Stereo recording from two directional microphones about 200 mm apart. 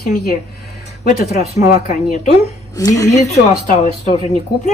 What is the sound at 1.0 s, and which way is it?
A woman's voice, 35° left (ahead or behind).